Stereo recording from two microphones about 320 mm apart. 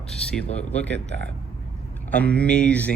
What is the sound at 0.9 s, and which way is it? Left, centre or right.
Speech, right.